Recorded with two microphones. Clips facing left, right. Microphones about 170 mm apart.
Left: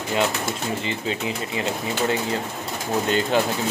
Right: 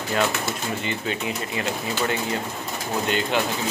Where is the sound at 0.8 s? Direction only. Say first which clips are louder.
Left 1 dB; 30° left (ahead or behind).